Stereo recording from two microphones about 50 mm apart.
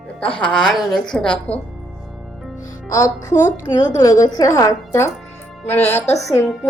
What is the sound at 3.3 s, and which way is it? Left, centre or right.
Speech, left.